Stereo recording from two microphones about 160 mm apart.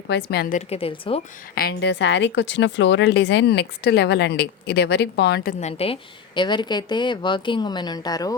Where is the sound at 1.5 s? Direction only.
80° left.